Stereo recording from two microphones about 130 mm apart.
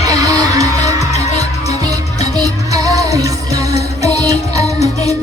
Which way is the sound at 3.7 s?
55° left (ahead or behind).